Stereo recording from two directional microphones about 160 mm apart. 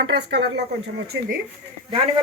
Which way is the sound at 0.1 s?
90° right.